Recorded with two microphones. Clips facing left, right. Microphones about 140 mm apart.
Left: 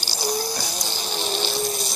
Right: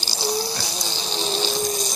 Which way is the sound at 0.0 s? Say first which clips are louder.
Right 1 dB; 10° left (ahead or behind).